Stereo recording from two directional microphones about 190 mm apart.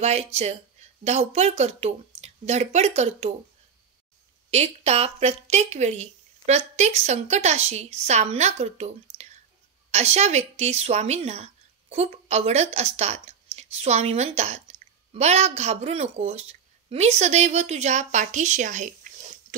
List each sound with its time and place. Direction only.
0.0 s speech: 35° right (ahead or behind)
4.5 s a woman's voice: 35° right (ahead or behind)